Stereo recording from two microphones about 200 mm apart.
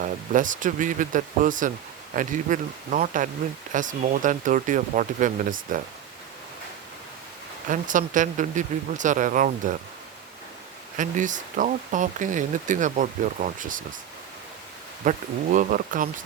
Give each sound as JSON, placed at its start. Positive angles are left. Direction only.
{"t": 0.0, "sound": "speech", "side_deg": -40}
{"t": 7.7, "sound": "speech", "side_deg": -40}
{"t": 10.9, "sound": "speech", "side_deg": -40}
{"t": 15.1, "sound": "speech", "side_deg": -40}